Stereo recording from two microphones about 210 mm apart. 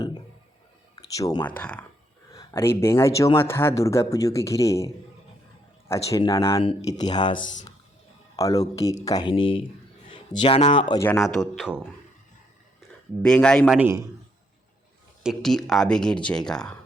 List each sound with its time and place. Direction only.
0.9 s speech: 15° left (ahead or behind)
1.5 s speech: 5° left (ahead or behind)
5.9 s speech: 15° left (ahead or behind)
6.6 s speech: 25° left (ahead or behind)
7.3 s speech: 65° left (ahead or behind)
8.4 s speech: 15° left (ahead or behind)
11.1 s speech: centre (ahead or behind)
13.2 s speech: 5° left (ahead or behind)
13.7 s a man's voice: 10° right (ahead or behind)
15.2 s speech: centre (ahead or behind)